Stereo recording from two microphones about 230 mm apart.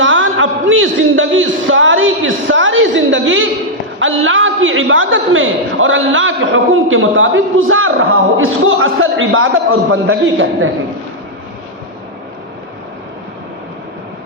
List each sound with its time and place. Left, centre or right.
0.0 s a man's voice: right